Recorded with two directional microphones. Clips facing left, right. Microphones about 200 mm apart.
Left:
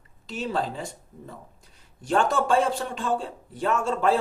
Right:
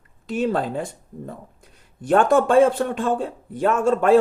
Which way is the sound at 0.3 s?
55° right (ahead or behind).